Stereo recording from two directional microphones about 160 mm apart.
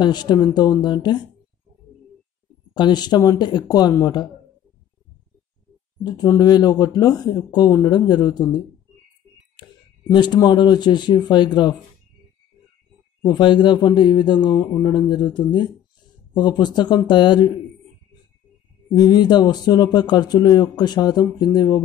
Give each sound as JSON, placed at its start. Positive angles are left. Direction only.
{"t": 0.0, "sound": "speech", "side_deg": 25}
{"t": 2.7, "sound": "speech", "side_deg": 25}
{"t": 6.0, "sound": "speech", "side_deg": 25}
{"t": 9.6, "sound": "speech", "side_deg": 30}
{"t": 13.2, "sound": "speech", "side_deg": 30}
{"t": 18.9, "sound": "speech", "side_deg": 25}